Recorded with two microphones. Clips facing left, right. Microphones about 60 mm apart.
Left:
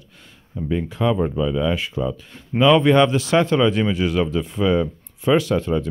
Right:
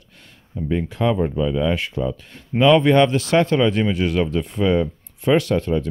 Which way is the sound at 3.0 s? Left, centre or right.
Right.